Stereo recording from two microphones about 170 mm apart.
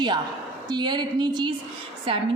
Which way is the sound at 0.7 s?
25° right (ahead or behind).